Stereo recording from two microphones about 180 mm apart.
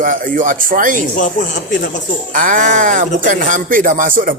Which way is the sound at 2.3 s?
50° right (ahead or behind).